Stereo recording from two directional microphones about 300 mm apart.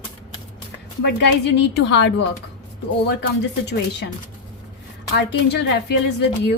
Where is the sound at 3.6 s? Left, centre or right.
Left.